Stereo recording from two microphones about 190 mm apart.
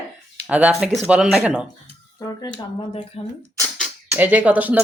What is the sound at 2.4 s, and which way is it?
Speech, 25° left (ahead or behind).